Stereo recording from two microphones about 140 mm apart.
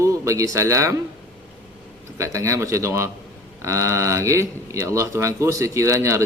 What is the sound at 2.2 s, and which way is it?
Speech, 20° right (ahead or behind).